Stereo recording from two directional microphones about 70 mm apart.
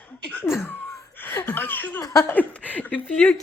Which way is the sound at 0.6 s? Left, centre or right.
Left.